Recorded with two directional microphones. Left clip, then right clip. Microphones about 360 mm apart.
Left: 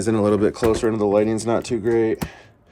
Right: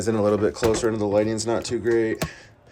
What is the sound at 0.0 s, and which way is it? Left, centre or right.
Speech, left.